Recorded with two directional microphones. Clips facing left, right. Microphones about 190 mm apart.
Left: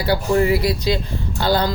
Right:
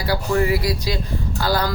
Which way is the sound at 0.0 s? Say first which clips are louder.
Left 3 dB; 25° left (ahead or behind).